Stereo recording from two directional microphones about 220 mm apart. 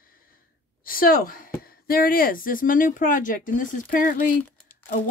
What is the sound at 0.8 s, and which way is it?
A woman's voice, 40° left (ahead or behind).